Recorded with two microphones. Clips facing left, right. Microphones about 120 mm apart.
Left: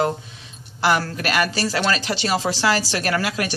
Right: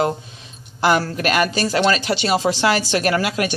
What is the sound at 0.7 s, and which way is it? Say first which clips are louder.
Speech: right 3 dB; 20° right (ahead or behind).